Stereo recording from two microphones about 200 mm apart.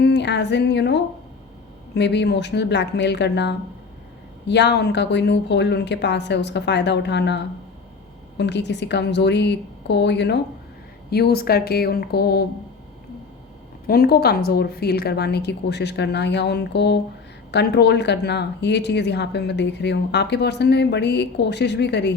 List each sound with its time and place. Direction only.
0.0 s a woman's voice: 60° left (ahead or behind)
13.8 s a woman's voice: 50° left (ahead or behind)